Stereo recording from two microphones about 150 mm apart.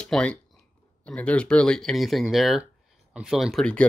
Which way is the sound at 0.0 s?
5° left (ahead or behind).